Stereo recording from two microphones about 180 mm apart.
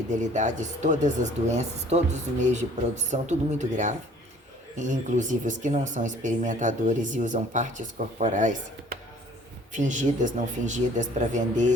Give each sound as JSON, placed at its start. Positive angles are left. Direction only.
{"t": 0.1, "sound": "speech", "side_deg": -40}